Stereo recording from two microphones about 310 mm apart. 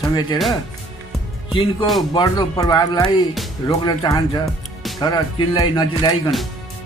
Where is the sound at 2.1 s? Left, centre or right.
Centre.